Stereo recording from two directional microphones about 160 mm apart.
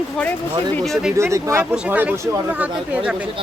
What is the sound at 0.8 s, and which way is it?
Speech, centre (ahead or behind).